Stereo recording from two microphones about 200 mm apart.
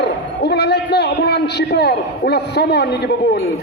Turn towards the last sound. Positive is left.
turn(degrees=55)  # may be behind; listen again after turning